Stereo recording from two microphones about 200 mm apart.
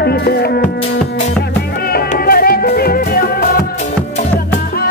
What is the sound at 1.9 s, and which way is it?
Music, 50° left (ahead or behind).